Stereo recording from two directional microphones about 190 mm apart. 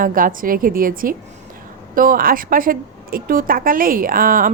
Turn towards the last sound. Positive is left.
turn(degrees=-45)  # may be behind; listen again after turning